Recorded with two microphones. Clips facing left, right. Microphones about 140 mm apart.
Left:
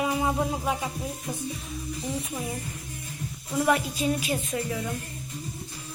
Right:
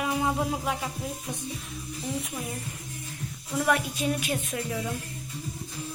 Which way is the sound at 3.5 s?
5° left (ahead or behind).